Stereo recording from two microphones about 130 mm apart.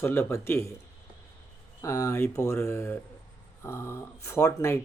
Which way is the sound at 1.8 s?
25° left (ahead or behind).